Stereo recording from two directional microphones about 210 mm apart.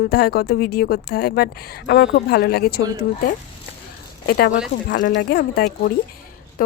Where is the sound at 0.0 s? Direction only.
50° left (ahead or behind).